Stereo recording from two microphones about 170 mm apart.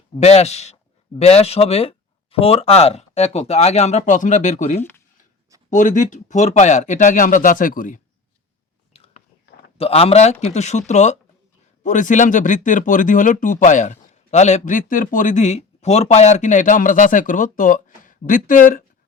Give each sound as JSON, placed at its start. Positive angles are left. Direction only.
{"t": 0.2, "sound": "speech", "side_deg": 40}
{"t": 9.7, "sound": "speech", "side_deg": 35}